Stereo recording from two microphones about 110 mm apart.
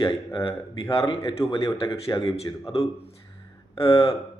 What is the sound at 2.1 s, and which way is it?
Speech, 35° left (ahead or behind).